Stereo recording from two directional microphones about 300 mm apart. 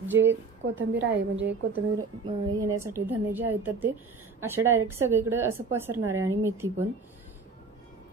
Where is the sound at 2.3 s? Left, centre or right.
Centre.